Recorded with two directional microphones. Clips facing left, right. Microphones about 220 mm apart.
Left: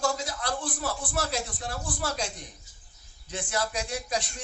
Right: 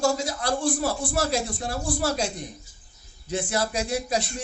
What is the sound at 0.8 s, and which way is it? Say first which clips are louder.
Speech: right 6 dB; 30° right (ahead or behind).